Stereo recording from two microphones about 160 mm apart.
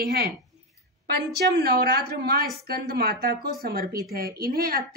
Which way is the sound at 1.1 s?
90° right.